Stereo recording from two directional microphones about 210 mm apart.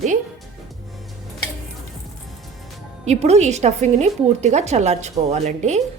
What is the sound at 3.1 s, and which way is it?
A woman's voice, 30° right (ahead or behind).